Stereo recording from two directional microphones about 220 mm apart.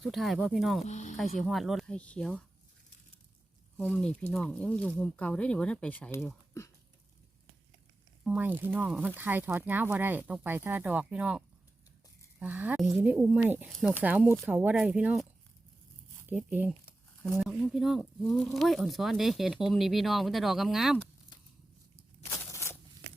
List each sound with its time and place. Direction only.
0.0 s speech: centre (ahead or behind)
0.9 s speech: 30° left (ahead or behind)
1.1 s speech: centre (ahead or behind)
3.8 s speech: 5° left (ahead or behind)
8.3 s speech: 10° right (ahead or behind)
22.5 s a sound: 10° left (ahead or behind)